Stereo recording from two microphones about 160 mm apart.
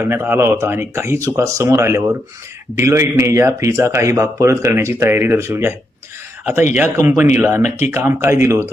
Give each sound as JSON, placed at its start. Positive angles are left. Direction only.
{"t": 0.0, "sound": "speech", "side_deg": -15}
{"t": 6.7, "sound": "speech", "side_deg": -15}